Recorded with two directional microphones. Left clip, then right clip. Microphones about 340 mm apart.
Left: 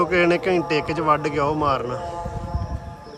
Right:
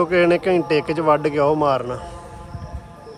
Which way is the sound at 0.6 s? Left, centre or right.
Centre.